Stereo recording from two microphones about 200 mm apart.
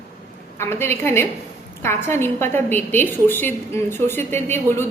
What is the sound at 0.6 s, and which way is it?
A woman's voice, 10° left (ahead or behind).